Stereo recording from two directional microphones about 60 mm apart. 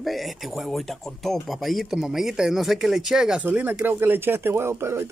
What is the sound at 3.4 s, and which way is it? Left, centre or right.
Speech, right.